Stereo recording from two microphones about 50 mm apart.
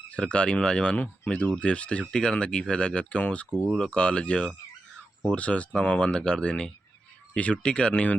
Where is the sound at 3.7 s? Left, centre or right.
Centre.